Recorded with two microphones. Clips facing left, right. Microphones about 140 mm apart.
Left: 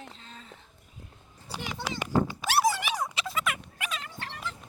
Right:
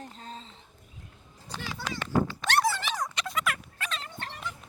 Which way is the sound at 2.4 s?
10° left (ahead or behind).